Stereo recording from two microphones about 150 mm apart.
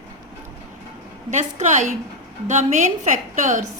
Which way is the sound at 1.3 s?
50° right (ahead or behind).